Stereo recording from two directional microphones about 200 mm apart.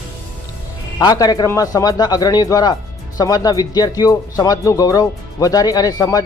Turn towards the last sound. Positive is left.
turn(degrees=20)  # may be behind; listen again after turning